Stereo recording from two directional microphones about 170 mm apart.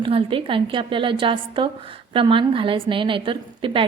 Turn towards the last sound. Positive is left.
turn(degrees=-30)  # may be behind; listen again after turning